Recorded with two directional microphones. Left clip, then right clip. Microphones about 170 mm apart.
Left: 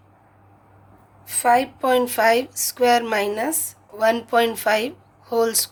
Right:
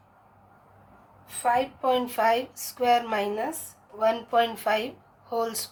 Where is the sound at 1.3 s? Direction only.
65° left (ahead or behind).